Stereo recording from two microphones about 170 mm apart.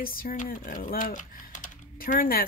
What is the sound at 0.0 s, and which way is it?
Speech, 55° left (ahead or behind).